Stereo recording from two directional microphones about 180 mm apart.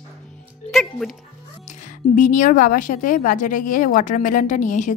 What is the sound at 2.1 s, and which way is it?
A woman's voice, 45° left (ahead or behind).